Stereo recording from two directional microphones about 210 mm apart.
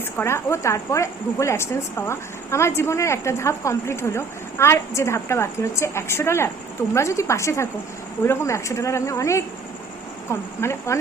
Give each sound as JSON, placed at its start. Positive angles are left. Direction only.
{"t": 0.2, "sound": "speech", "side_deg": 10}